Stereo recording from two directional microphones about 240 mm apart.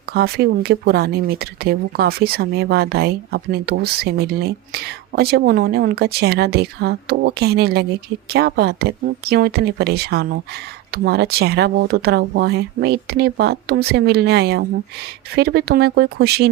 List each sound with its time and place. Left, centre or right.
0.1 s speech: right